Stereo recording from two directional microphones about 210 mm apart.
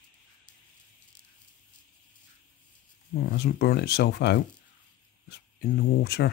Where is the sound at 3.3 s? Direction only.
50° left (ahead or behind).